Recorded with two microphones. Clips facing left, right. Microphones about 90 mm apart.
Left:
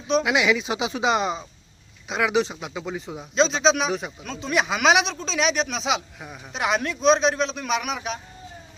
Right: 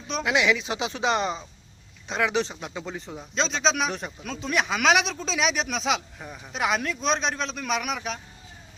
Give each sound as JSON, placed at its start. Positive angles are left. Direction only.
{"t": 0.1, "sound": "speech", "side_deg": 10}